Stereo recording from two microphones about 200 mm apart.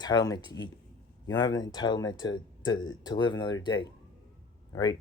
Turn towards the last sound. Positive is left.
turn(degrees=20)  # may be behind; listen again after turning